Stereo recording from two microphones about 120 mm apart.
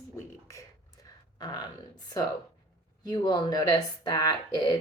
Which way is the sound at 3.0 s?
35° left (ahead or behind).